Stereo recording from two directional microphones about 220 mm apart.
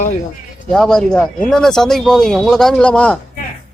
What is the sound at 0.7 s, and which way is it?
Speech, centre (ahead or behind).